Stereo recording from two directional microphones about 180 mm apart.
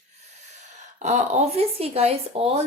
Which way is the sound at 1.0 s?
35° right (ahead or behind).